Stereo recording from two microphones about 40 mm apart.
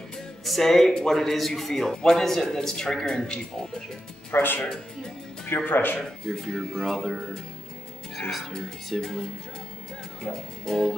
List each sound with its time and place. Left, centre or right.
0.5 s a man's voice: centre
4.3 s speech: left
5.7 s speech: left
6.6 s a man's voice: centre
8.2 s a man's voice: centre
10.7 s speech: centre